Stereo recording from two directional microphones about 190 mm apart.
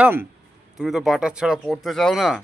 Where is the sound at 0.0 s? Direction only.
10° right (ahead or behind).